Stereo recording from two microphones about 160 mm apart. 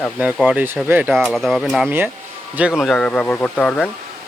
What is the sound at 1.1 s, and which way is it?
Speech, centre (ahead or behind).